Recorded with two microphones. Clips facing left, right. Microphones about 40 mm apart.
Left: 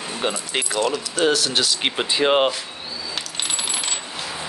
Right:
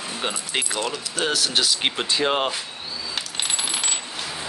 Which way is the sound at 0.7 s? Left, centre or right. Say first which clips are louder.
Left 5 dB; centre.